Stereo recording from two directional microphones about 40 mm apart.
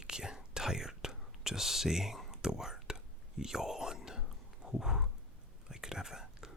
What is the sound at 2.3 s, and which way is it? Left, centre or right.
Whispering, centre.